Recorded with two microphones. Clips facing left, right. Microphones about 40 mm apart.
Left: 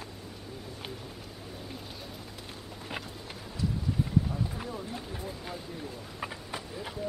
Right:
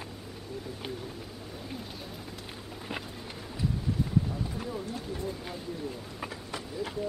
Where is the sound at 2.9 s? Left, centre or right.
Centre.